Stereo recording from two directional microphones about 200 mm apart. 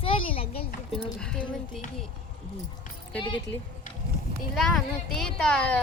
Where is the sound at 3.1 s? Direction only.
5° left (ahead or behind).